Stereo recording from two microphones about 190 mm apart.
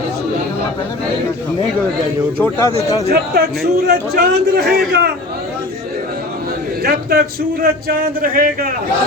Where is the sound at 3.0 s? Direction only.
55° right (ahead or behind).